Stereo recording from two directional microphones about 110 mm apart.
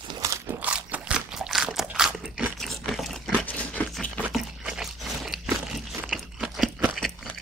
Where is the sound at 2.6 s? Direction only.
Centre (ahead or behind).